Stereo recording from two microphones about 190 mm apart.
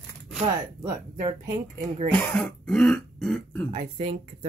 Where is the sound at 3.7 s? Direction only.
30° right (ahead or behind).